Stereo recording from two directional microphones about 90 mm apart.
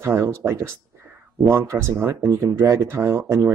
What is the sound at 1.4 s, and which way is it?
Speech, 30° right (ahead or behind).